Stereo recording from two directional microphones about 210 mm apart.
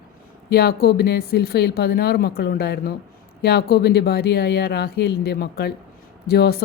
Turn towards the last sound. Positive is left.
turn(degrees=50)  # may be behind; listen again after turning